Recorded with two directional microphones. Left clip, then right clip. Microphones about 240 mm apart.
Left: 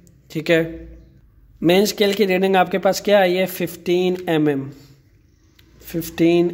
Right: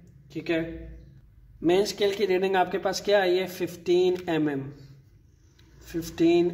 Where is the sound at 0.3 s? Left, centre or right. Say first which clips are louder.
Left 11 dB; left.